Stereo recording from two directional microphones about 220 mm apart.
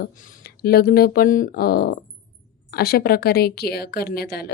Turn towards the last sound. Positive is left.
turn(degrees=45)  # may be behind; listen again after turning